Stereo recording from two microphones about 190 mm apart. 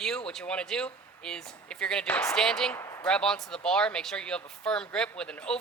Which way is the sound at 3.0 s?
5° left (ahead or behind).